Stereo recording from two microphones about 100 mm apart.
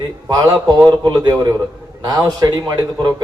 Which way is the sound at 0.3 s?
35° right (ahead or behind).